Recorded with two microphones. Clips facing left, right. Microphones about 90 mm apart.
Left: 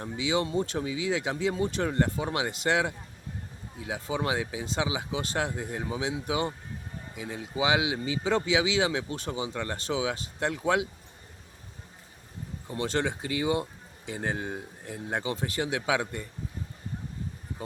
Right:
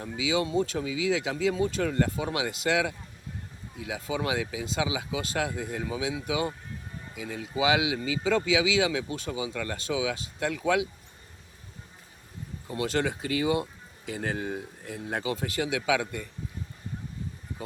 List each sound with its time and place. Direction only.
0.6 s speech: 30° left (ahead or behind)
3.8 s speech: 35° left (ahead or behind)
12.7 s speech: 30° left (ahead or behind)